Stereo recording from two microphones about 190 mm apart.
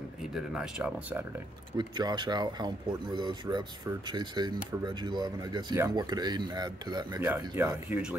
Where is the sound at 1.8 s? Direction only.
25° right (ahead or behind).